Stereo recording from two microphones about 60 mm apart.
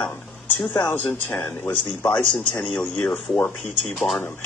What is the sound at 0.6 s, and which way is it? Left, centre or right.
Speech, left.